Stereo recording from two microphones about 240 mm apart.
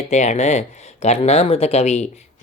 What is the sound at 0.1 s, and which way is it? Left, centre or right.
Speech, left.